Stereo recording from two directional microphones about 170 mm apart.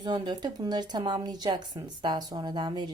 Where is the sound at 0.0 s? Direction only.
25° right (ahead or behind).